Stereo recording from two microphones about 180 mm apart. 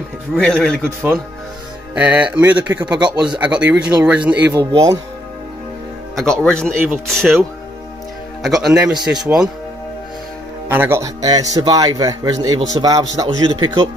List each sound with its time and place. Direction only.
0.3 s speech: centre (ahead or behind)
2.0 s speech: 5° right (ahead or behind)
3.0 s a man's voice: 25° right (ahead or behind)
3.3 s speech: 5° right (ahead or behind)
4.6 s a man's voice: 20° right (ahead or behind)
6.1 s speech: 5° left (ahead or behind)
10.7 s a man's voice: 10° right (ahead or behind)